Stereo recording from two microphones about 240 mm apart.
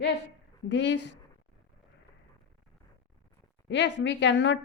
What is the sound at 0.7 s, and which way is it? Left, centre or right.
Speech, left.